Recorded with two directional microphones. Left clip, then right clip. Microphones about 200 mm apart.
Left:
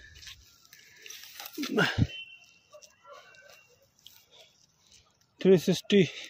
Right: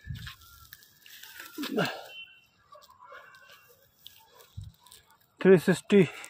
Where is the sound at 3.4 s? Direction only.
35° right (ahead or behind).